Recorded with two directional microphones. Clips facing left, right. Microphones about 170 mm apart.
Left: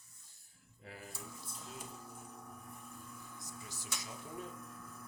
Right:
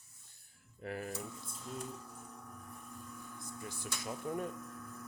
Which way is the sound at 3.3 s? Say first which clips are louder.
Right 5 dB; 55° right (ahead or behind).